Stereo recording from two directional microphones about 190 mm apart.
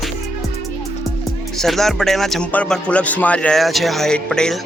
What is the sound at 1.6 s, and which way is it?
Speech, centre (ahead or behind).